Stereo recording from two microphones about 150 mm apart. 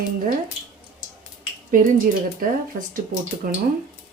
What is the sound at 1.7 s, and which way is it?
Speech, 65° right (ahead or behind).